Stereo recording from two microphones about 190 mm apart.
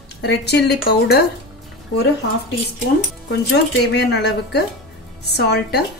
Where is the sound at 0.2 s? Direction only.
60° left (ahead or behind).